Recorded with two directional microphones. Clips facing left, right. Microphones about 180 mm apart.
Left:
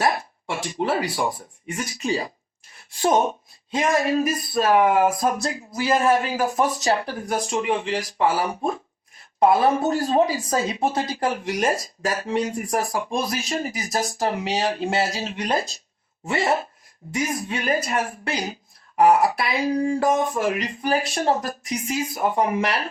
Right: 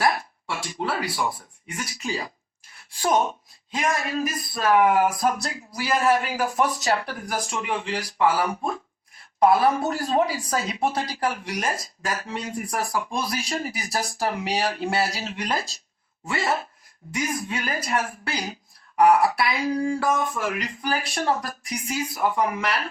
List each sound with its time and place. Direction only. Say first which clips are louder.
0.0 s speech: left 1 dB; 25° left (ahead or behind)